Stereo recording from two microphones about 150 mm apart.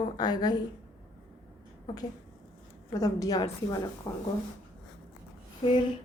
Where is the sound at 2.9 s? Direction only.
25° left (ahead or behind).